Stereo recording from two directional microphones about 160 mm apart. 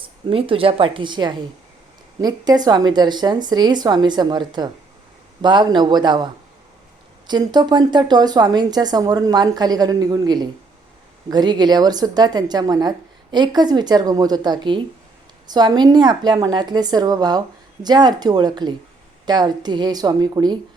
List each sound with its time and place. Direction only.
0.3 s a woman's voice: 35° right (ahead or behind)